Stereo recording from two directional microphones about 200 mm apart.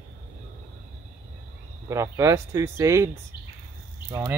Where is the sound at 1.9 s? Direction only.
15° right (ahead or behind).